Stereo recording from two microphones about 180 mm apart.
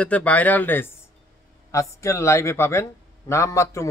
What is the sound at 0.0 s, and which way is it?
Speech, 10° left (ahead or behind).